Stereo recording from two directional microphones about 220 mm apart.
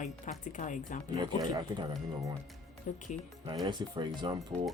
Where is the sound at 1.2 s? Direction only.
20° right (ahead or behind).